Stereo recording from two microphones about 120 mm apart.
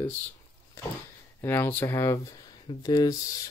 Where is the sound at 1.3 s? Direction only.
20° left (ahead or behind).